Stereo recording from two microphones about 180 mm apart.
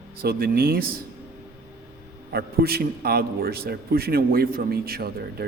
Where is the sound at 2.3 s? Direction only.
60° right (ahead or behind).